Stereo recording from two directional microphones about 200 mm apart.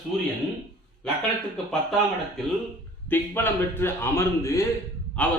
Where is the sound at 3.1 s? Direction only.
10° left (ahead or behind).